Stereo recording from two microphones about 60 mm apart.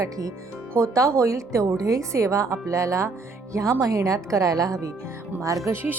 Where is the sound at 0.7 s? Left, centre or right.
Right.